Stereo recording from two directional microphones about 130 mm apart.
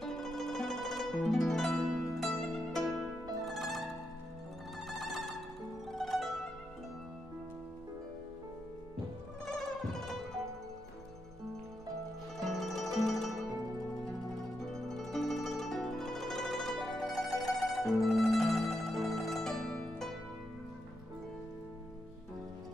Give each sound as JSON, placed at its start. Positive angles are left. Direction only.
{"t": 0.0, "sound": "music", "side_deg": 5}
{"t": 2.8, "sound": "pizzicato", "side_deg": -25}
{"t": 3.4, "sound": "pizzicato", "side_deg": 0}
{"t": 4.8, "sound": "music", "side_deg": 0}
{"t": 5.9, "sound": "zither", "side_deg": 0}
{"t": 9.5, "sound": "zither", "side_deg": 0}
{"t": 12.4, "sound": "music", "side_deg": 0}
{"t": 14.6, "sound": "zither", "side_deg": 5}